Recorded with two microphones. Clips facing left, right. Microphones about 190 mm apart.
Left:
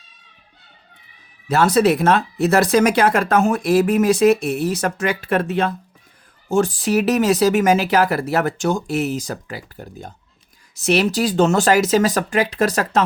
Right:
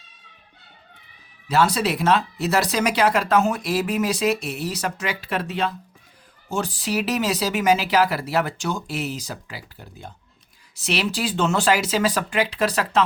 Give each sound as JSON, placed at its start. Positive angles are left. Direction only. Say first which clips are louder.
{"t": 1.5, "sound": "speech", "louder": "left 6 dB", "side_deg": 50}